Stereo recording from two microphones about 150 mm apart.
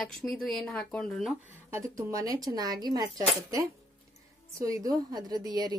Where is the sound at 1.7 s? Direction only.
20° right (ahead or behind).